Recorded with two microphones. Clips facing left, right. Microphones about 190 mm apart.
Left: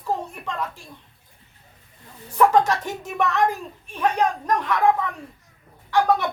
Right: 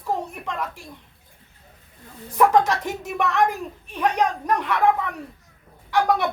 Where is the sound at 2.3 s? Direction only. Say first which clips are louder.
Even; 15° right (ahead or behind).